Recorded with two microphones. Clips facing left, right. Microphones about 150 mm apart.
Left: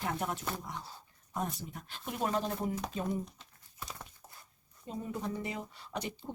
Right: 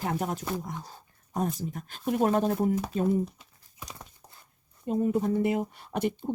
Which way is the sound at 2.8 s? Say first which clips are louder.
Right 9 dB; 10° right (ahead or behind).